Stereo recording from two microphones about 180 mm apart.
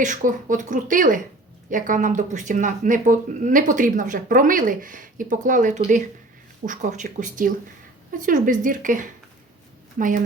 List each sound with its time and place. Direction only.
0.0 s speech: 45° right (ahead or behind)